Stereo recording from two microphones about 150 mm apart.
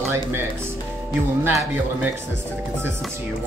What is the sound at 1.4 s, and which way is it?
Speech, 15° right (ahead or behind).